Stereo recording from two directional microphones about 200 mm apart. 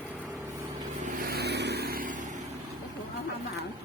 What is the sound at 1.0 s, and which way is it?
Vehicle, 50° right (ahead or behind).